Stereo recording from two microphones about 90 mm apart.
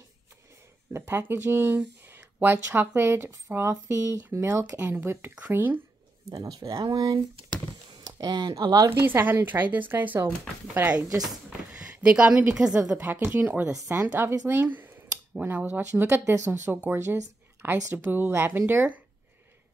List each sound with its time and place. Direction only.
0.9 s speech: 25° right (ahead or behind)
4.7 s speech: 15° right (ahead or behind)
6.2 s speech: 40° right (ahead or behind)
7.5 s a sound: 50° right (ahead or behind)
8.9 s speech: 25° right (ahead or behind)
11.8 s a woman's voice: 10° right (ahead or behind)